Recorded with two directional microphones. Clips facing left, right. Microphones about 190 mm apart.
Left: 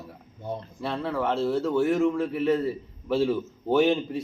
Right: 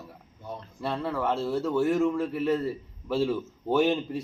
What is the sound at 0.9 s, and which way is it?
Speech, 10° right (ahead or behind).